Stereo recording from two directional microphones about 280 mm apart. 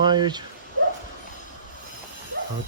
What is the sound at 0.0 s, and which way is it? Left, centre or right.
Speech, centre.